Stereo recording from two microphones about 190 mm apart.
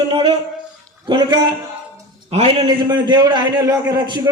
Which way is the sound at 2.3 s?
30° right (ahead or behind).